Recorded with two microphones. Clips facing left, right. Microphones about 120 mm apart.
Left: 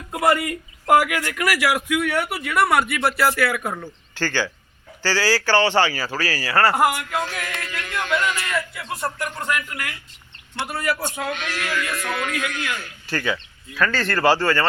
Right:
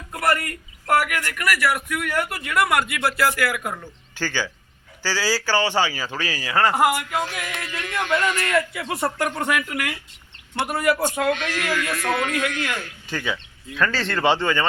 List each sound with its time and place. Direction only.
0.1 s a man's voice: 15° left (ahead or behind)
4.1 s a man's voice: 15° right (ahead or behind)
6.7 s a sound: centre (ahead or behind)
7.6 s speech: 30° right (ahead or behind)
8.4 s speech: 70° right (ahead or behind)
10.6 s a man's voice: 50° right (ahead or behind)
13.1 s speech: 15° right (ahead or behind)
13.7 s speech: 25° right (ahead or behind)
14.1 s a sound: 5° left (ahead or behind)
14.3 s a man's voice: 20° right (ahead or behind)